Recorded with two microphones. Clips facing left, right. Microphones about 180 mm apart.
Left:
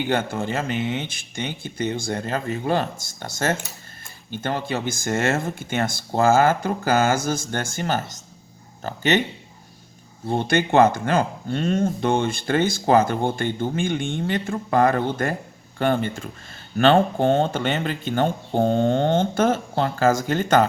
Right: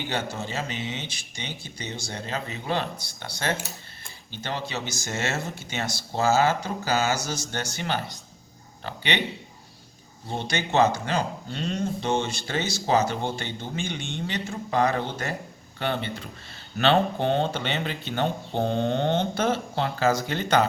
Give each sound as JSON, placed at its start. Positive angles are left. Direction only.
{"t": 0.1, "sound": "speech", "side_deg": 55}
{"t": 10.2, "sound": "speech", "side_deg": 55}